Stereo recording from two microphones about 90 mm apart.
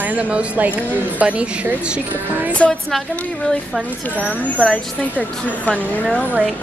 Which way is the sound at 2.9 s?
Centre (ahead or behind).